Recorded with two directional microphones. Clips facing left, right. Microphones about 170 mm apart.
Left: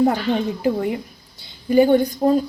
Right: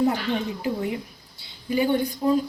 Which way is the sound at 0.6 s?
50° left (ahead or behind).